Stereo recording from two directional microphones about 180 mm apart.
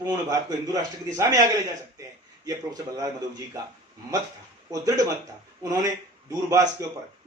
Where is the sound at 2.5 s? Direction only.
20° right (ahead or behind).